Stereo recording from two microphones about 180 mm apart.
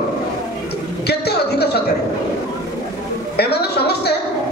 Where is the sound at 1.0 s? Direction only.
65° left (ahead or behind).